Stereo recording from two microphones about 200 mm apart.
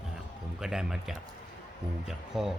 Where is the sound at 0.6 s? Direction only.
5° right (ahead or behind).